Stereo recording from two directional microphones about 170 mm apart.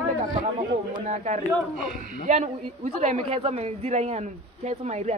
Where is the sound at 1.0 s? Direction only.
45° right (ahead or behind).